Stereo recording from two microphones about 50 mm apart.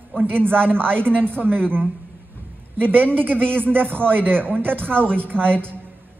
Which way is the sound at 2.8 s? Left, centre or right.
Right.